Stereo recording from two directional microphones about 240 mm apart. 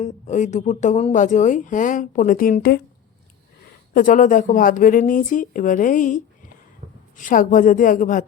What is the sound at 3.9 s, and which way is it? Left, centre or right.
A woman's voice, left.